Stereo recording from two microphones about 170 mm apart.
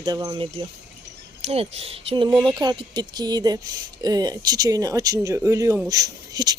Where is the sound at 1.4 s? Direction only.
35° right (ahead or behind); by 6.5 s 20° right (ahead or behind).